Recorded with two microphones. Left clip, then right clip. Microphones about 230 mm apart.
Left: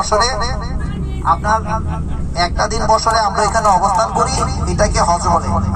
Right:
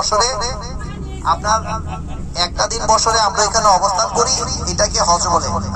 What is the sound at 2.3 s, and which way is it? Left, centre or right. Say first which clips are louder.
Speech: left 2 dB; right.